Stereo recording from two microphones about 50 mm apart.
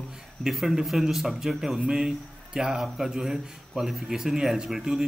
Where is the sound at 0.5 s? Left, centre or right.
Centre.